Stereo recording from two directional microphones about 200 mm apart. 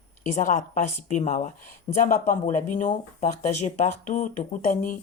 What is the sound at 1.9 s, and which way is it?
Speech, 25° left (ahead or behind).